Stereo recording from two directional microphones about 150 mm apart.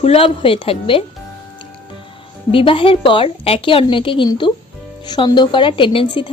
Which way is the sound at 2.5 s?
35° left (ahead or behind).